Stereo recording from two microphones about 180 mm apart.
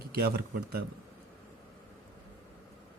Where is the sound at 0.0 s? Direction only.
60° right (ahead or behind).